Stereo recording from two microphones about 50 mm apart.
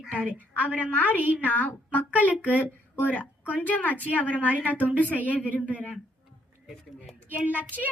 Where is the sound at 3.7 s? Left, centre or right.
Left.